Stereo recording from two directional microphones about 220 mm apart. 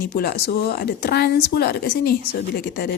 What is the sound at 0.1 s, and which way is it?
A woman's voice, 45° left (ahead or behind).